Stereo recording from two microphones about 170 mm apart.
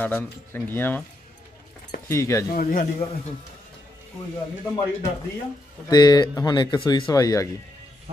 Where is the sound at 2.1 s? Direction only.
15° left (ahead or behind).